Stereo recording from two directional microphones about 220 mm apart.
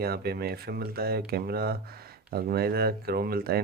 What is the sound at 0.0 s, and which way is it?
Speech, 45° right (ahead or behind).